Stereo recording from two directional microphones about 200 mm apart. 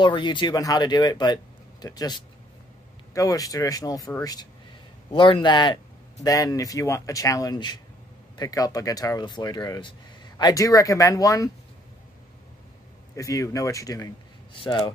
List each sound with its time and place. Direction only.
0.0 s speech: 25° left (ahead or behind)
13.1 s speech: 15° left (ahead or behind)